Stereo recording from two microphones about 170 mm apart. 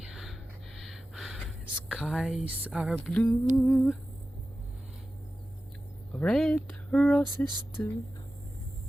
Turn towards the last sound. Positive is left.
turn(degrees=15)  # may be behind; listen again after turning